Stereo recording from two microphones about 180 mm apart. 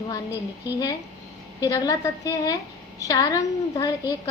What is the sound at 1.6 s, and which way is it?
A woman's voice, 20° left (ahead or behind).